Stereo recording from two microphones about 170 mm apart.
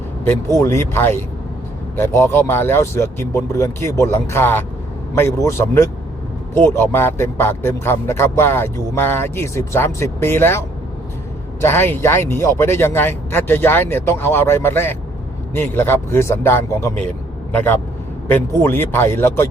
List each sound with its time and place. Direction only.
0.3 s a man's voice: 15° left (ahead or behind)